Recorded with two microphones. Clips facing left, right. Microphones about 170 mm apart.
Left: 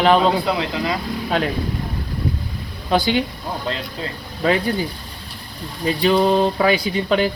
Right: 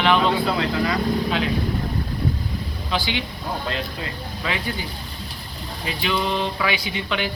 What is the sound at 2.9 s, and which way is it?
Speech, 40° left (ahead or behind).